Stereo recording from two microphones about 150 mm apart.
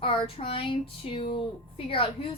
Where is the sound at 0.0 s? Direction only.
40° left (ahead or behind).